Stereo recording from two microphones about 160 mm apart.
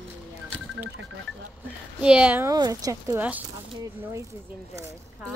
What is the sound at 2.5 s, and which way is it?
Speech, 25° right (ahead or behind).